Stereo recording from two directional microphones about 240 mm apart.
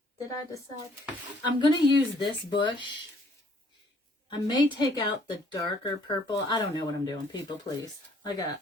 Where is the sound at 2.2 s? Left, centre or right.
Centre.